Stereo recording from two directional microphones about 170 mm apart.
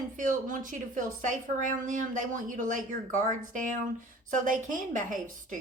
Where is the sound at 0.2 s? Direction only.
50° right (ahead or behind).